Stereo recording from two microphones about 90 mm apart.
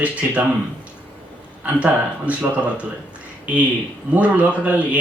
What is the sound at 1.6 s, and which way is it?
Speech, 15° right (ahead or behind).